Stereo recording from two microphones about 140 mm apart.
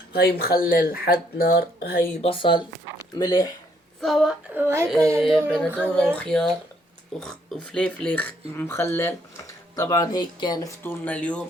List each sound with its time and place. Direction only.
0.2 s speech: 90° left
2.2 s speech: 40° left (ahead or behind)
4.0 s female singing: centre (ahead or behind)
4.5 s a woman's voice: 20° right (ahead or behind)
5.5 s female singing: 5° left (ahead or behind)
7.2 s speech: 5° left (ahead or behind); by 10.9 s 25° left (ahead or behind)
11.0 s speech: 10° left (ahead or behind)